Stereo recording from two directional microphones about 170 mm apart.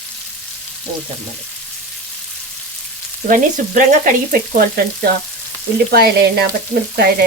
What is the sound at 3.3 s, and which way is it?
Frying, 50° right (ahead or behind).